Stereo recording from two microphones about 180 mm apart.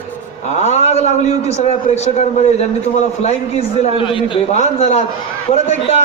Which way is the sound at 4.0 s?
30° left (ahead or behind).